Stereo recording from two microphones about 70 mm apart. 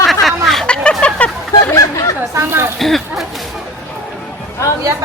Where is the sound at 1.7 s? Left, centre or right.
Left.